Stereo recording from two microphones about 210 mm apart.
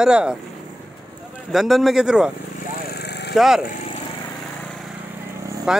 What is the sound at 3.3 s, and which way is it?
Speech, centre (ahead or behind).